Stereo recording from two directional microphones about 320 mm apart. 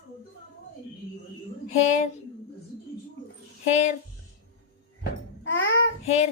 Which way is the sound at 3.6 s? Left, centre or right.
Left.